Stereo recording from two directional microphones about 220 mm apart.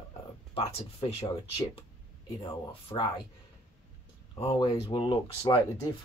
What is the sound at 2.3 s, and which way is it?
Speech, 20° left (ahead or behind).